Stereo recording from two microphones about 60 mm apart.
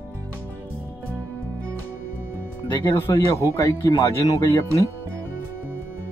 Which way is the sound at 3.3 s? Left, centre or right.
Left.